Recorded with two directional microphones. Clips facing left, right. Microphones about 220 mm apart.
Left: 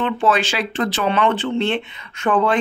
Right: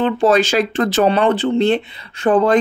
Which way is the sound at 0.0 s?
40° right (ahead or behind).